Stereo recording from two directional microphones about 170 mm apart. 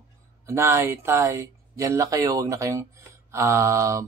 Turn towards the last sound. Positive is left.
turn(degrees=-20)  # may be behind; listen again after turning